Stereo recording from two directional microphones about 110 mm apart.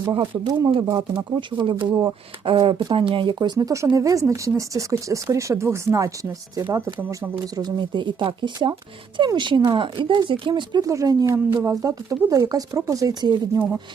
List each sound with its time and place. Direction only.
0.1 s speech: 45° right (ahead or behind)
10.8 s speech: 30° right (ahead or behind)